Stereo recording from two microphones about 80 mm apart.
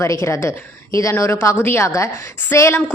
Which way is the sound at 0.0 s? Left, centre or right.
Left.